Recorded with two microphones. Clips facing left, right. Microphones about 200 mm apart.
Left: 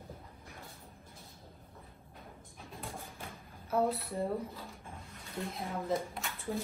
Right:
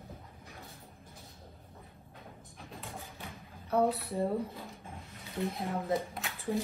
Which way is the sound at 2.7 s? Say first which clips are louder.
Left 1 dB; 50° left (ahead or behind).